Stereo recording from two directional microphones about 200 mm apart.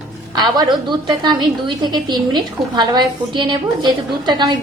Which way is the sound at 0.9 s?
20° right (ahead or behind).